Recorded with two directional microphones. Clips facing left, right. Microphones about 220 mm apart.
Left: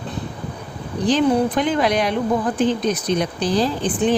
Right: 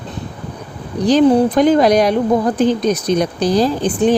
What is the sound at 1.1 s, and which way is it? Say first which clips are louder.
Speech: right 6 dB; 40° right (ahead or behind).